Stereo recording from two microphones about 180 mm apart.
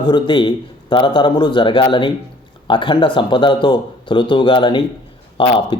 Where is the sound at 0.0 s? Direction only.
25° left (ahead or behind).